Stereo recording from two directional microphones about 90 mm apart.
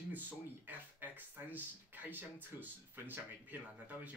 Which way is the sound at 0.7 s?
20° right (ahead or behind).